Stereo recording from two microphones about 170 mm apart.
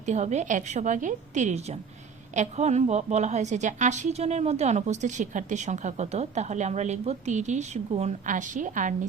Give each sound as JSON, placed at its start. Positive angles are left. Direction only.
{"t": 0.0, "sound": "a woman's voice", "side_deg": -45}